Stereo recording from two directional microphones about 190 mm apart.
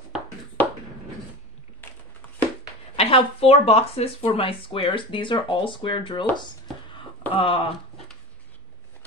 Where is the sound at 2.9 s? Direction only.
30° left (ahead or behind).